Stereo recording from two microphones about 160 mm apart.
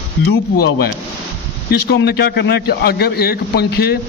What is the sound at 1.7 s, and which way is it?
A man's voice, 90° left.